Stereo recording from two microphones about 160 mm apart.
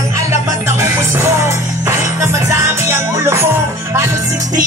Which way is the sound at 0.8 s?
15° right (ahead or behind).